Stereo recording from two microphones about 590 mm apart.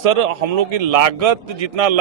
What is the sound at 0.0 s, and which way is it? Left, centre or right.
A man's voice, right.